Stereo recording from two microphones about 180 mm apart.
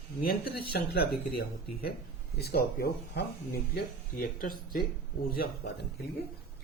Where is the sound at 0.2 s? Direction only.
55° left (ahead or behind).